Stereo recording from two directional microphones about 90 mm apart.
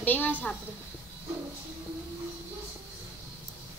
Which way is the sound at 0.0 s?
20° left (ahead or behind).